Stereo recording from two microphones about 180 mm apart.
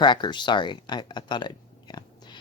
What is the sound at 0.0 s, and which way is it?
Speech, 25° left (ahead or behind).